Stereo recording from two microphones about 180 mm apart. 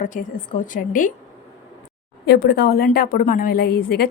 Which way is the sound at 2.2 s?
65° left (ahead or behind).